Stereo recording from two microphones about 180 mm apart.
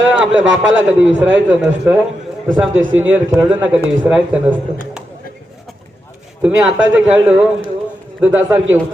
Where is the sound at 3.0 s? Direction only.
10° right (ahead or behind).